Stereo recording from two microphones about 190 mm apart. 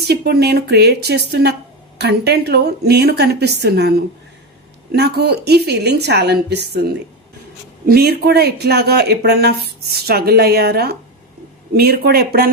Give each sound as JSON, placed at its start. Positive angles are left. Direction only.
{"t": 0.1, "sound": "speech", "side_deg": -55}
{"t": 7.9, "sound": "speech", "side_deg": -55}